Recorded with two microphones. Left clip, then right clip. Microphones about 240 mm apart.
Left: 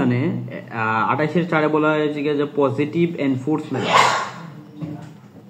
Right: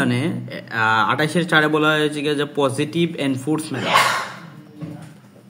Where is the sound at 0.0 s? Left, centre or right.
Right.